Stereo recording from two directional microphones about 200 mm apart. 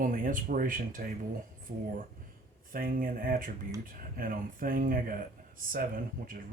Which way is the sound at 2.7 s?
45° right (ahead or behind).